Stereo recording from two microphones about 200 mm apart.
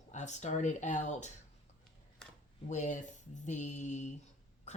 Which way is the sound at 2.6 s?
40° left (ahead or behind).